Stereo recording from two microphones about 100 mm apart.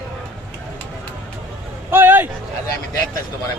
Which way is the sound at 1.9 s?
20° right (ahead or behind).